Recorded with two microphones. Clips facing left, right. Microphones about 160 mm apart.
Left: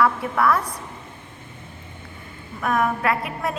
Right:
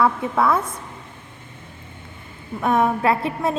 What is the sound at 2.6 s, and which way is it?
Speech, 25° right (ahead or behind).